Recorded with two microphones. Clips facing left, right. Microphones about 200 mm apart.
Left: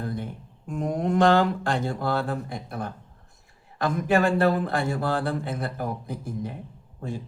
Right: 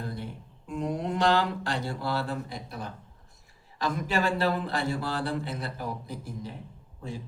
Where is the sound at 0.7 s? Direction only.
50° left (ahead or behind).